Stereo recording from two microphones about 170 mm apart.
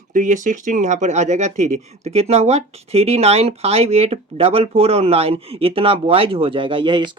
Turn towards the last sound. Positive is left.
turn(degrees=-30)  # may be behind; listen again after turning